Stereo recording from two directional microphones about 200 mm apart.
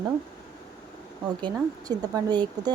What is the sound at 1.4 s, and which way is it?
Speech, 20° right (ahead or behind).